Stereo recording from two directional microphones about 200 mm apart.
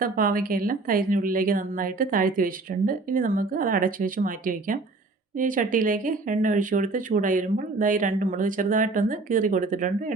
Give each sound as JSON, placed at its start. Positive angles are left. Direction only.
{"t": 0.0, "sound": "speech", "side_deg": -45}